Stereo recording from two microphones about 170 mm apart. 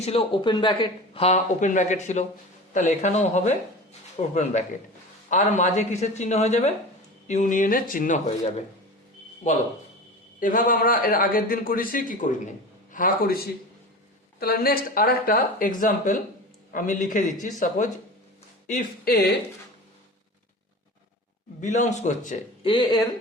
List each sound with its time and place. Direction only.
0.0 s speech: 35° left (ahead or behind)
10.4 s a man's voice: 50° left (ahead or behind); by 19.4 s 70° left (ahead or behind)
21.6 s speech: 45° left (ahead or behind)
22.6 s speech: 25° left (ahead or behind)